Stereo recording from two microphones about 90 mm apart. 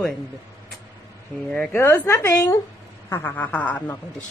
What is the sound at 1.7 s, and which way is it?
A woman's voice, 30° left (ahead or behind).